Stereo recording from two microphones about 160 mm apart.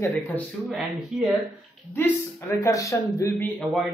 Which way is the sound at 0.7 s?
5° right (ahead or behind).